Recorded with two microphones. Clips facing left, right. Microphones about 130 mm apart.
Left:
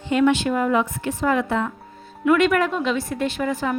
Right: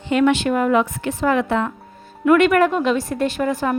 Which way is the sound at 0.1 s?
75° right (ahead or behind).